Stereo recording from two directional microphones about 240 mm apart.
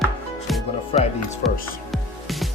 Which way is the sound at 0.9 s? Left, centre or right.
Left.